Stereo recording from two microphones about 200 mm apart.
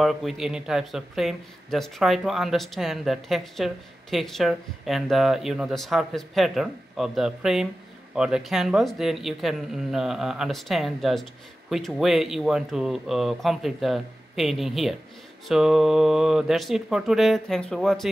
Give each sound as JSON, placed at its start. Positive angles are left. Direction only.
{"t": 0.0, "sound": "speech", "side_deg": 0}